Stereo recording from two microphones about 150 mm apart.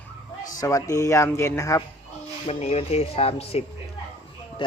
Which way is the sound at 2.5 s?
45° left (ahead or behind).